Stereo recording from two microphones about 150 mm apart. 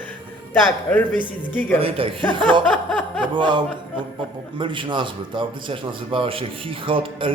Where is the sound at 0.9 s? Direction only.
10° left (ahead or behind).